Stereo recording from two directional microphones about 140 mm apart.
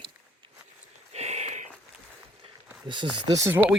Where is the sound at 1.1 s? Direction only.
50° right (ahead or behind).